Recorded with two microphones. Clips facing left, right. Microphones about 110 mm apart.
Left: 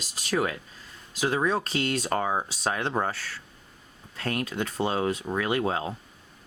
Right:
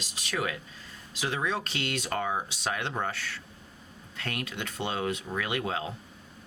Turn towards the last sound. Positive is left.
turn(degrees=35)  # may be behind; listen again after turning